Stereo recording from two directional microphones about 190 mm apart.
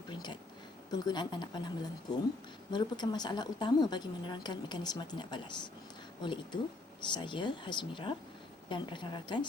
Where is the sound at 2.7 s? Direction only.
20° left (ahead or behind).